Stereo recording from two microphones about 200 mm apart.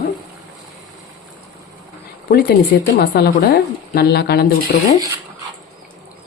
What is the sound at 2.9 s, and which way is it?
A woman's voice, 55° left (ahead or behind).